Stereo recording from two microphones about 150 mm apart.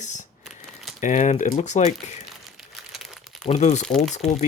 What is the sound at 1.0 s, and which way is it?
Speech, 55° left (ahead or behind).